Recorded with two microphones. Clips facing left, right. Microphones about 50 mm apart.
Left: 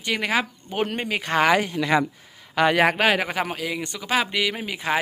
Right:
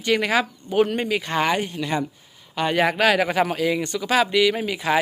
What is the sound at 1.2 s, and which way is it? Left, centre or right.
Speech, left.